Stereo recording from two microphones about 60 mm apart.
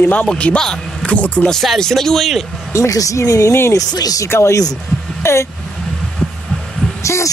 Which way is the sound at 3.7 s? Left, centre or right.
Left.